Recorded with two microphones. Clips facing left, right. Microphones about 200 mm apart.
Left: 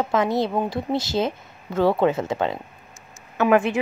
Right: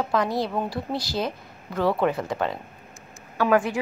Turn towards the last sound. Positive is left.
turn(degrees=20)  # may be behind; listen again after turning